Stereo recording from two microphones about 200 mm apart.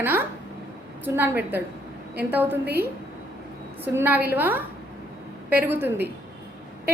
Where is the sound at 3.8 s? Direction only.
10° right (ahead or behind).